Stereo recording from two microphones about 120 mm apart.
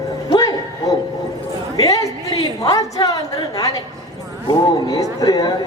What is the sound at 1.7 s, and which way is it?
A woman's voice, 30° left (ahead or behind).